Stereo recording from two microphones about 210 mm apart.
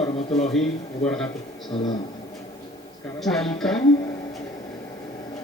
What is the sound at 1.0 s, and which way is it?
Speech, 5° left (ahead or behind).